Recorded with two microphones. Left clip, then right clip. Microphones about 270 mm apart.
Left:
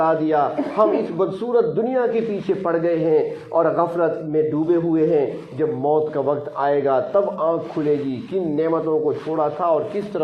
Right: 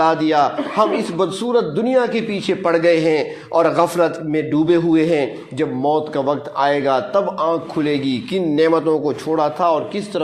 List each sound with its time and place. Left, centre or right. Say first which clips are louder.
0.0 s a man's voice: right 3 dB; right